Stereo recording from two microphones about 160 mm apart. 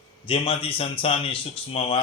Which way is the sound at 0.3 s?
35° left (ahead or behind).